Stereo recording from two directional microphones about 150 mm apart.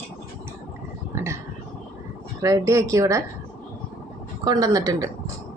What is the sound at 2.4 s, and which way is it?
Speech, 20° right (ahead or behind).